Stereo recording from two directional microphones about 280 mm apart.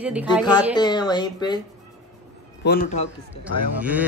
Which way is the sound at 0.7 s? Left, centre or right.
Centre.